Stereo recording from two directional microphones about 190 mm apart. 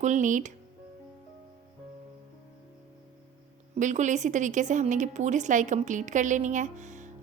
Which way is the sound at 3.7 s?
40° right (ahead or behind).